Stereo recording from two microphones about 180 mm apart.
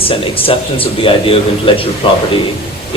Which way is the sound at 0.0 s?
30° left (ahead or behind).